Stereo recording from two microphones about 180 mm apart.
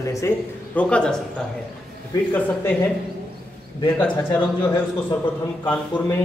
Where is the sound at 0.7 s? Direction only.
5° left (ahead or behind).